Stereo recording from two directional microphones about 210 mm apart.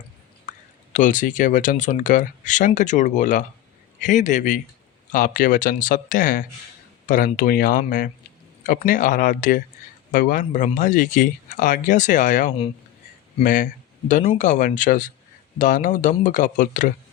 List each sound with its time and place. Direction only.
0.9 s speech: 40° left (ahead or behind)